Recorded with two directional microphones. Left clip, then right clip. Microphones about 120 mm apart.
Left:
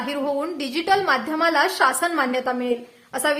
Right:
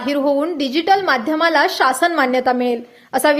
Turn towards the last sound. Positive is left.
turn(degrees=-60)  # may be behind; listen again after turning